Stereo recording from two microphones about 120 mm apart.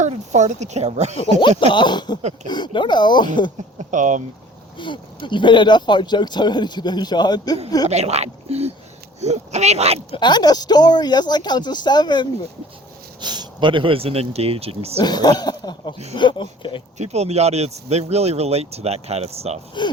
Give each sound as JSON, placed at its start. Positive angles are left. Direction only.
{"t": 0.0, "sound": "speech", "side_deg": -75}
{"t": 1.4, "sound": "speech", "side_deg": 40}
{"t": 3.8, "sound": "speech", "side_deg": -90}
{"t": 4.8, "sound": "speech", "side_deg": 40}
{"t": 7.9, "sound": "speech", "side_deg": -65}
{"t": 10.1, "sound": "speech", "side_deg": 40}
{"t": 13.2, "sound": "speech", "side_deg": -35}
{"t": 15.0, "sound": "speech", "side_deg": 35}
{"t": 17.0, "sound": "speech", "side_deg": -65}
{"t": 19.8, "sound": "speech", "side_deg": 40}